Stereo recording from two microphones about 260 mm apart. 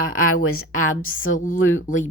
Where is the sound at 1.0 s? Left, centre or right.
Left.